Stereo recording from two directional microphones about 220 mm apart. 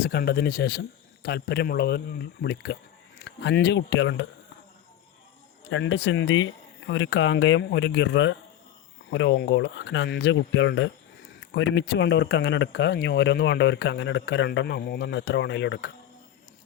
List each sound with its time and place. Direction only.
0.0 s speech: 45° left (ahead or behind)
5.6 s speech: 55° left (ahead or behind)